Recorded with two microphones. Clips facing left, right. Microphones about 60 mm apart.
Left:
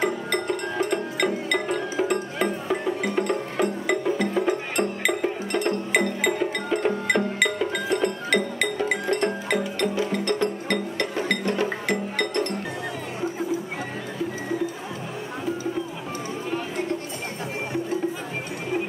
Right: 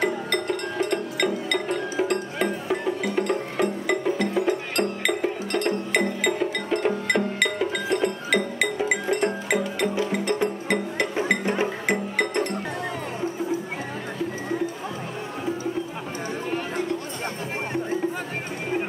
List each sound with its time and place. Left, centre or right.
0.0 s music: centre